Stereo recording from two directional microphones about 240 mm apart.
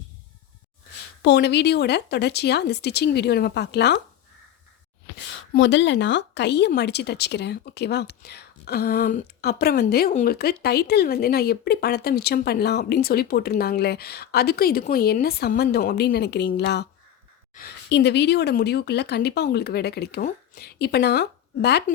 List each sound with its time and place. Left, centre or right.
1.2 s speech: left
5.5 s speech: left